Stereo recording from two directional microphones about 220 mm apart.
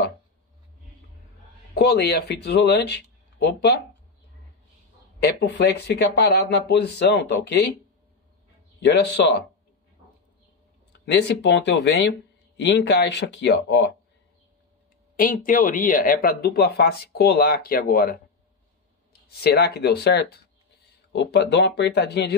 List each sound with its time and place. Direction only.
1.8 s speech: 45° left (ahead or behind)
5.2 s speech: 50° left (ahead or behind)
11.1 s speech: 50° left (ahead or behind)
15.1 s speech: 40° left (ahead or behind)
19.4 s speech: 45° left (ahead or behind)